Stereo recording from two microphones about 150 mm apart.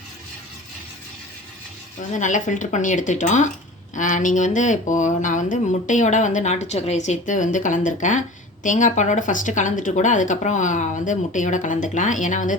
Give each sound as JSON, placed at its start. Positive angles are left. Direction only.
{"t": 2.0, "sound": "speech", "side_deg": 55}